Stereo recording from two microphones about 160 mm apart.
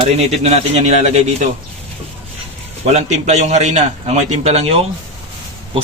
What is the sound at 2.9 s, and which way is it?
A man's voice, 45° right (ahead or behind).